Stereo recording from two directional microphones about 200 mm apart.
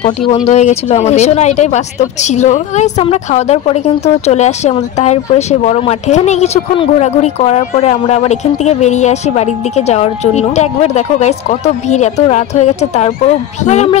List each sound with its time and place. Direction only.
0.3 s speech: 35° left (ahead or behind)